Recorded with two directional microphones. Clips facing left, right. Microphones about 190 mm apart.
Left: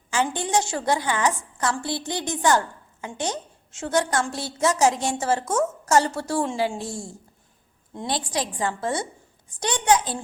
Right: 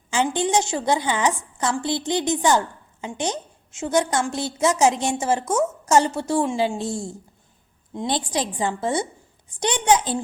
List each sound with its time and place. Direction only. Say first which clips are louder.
0.1 s a woman's voice: right 3 dB; 20° right (ahead or behind)